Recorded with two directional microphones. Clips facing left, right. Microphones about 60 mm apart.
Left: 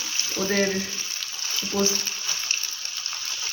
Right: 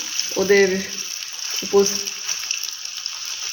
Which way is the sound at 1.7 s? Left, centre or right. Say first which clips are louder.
Right 9 dB; right.